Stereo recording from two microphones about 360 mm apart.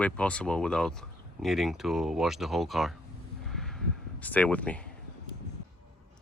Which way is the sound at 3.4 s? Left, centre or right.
Centre.